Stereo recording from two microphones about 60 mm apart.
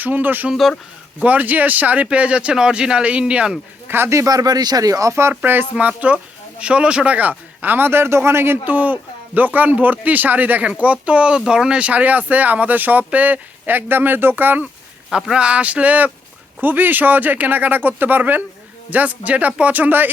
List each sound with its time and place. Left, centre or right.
0.0 s speech: right
3.8 s speech: right
4.3 s speech: right
5.3 s speech: right
8.6 s speech: right
15.1 s speech: centre; by 20.1 s right